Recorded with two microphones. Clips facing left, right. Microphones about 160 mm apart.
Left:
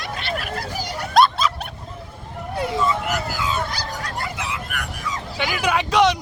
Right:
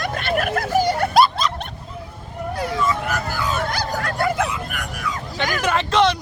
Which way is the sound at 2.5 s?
25° left (ahead or behind).